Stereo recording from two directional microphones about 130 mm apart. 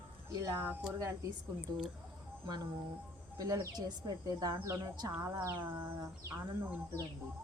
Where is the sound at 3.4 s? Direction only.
30° right (ahead or behind).